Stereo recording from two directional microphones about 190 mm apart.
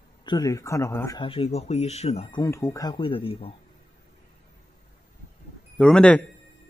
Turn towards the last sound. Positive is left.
turn(degrees=5)  # may be behind; listen again after turning